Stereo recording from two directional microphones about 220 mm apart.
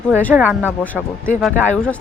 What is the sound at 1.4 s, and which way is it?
Speech, 5° left (ahead or behind).